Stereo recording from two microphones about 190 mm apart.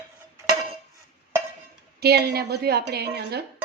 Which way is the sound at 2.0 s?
55° right (ahead or behind).